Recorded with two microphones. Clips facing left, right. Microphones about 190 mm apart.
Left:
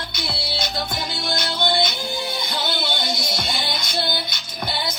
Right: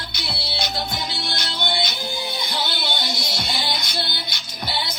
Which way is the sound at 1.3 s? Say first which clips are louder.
Left 6 dB; 55° left (ahead or behind).